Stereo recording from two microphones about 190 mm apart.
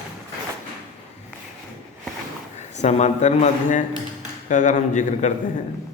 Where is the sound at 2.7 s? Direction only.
35° left (ahead or behind).